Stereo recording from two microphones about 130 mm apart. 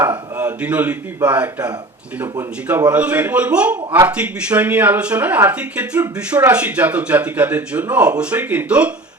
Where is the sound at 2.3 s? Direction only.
20° right (ahead or behind).